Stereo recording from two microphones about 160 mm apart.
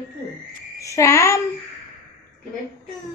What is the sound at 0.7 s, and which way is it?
Speech, 20° left (ahead or behind).